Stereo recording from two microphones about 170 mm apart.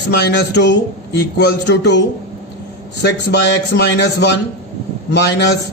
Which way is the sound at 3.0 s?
75° left (ahead or behind).